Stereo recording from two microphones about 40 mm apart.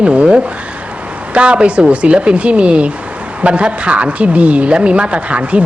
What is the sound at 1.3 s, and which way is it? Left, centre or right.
A woman's voice, right.